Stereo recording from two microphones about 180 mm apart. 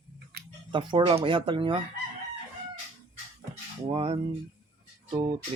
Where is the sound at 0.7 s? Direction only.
25° right (ahead or behind).